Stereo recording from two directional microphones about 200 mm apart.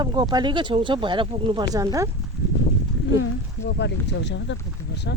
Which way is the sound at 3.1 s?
60° left (ahead or behind).